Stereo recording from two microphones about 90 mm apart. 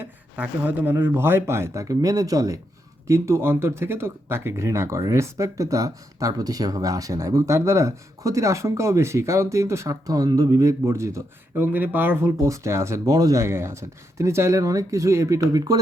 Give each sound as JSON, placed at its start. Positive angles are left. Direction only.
{"t": 0.0, "sound": "speech", "side_deg": -15}
{"t": 3.1, "sound": "speech", "side_deg": -30}
{"t": 12.4, "sound": "speech", "side_deg": -35}